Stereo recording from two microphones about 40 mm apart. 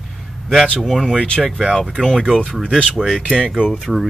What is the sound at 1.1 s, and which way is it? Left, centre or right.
Speech, left.